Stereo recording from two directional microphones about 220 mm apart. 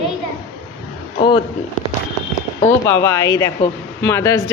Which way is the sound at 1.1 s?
20° left (ahead or behind).